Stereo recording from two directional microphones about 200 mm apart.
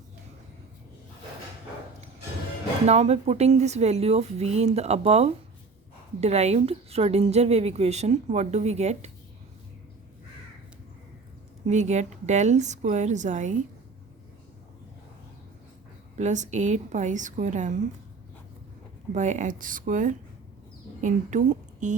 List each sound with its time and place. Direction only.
2.8 s a woman's voice: 30° right (ahead or behind)
11.6 s a woman's voice: 35° right (ahead or behind)
16.1 s a woman's voice: 35° right (ahead or behind)
19.1 s a woman's voice: 35° right (ahead or behind)